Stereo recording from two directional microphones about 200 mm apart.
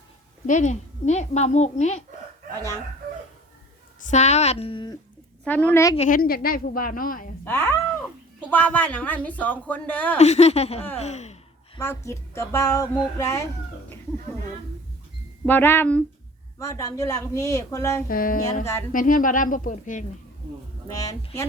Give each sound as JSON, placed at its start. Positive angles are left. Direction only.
{"t": 0.4, "sound": "a woman's voice", "side_deg": 40}
{"t": 4.0, "sound": "a woman's voice", "side_deg": 35}
{"t": 5.5, "sound": "speech", "side_deg": 5}
{"t": 6.0, "sound": "a woman's voice", "side_deg": 45}
{"t": 7.4, "sound": "speech", "side_deg": 10}
{"t": 10.2, "sound": "a woman's voice", "side_deg": 35}
{"t": 11.8, "sound": "speech", "side_deg": 10}
{"t": 15.4, "sound": "speech", "side_deg": 10}
{"t": 18.1, "sound": "a woman's voice", "side_deg": 45}
{"t": 18.6, "sound": "speech", "side_deg": 15}
{"t": 18.9, "sound": "a woman's voice", "side_deg": 45}
{"t": 20.8, "sound": "speech", "side_deg": 15}